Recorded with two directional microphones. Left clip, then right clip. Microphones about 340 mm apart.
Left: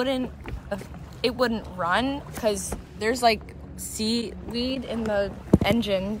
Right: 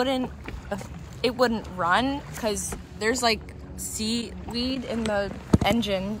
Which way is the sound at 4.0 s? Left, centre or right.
Left.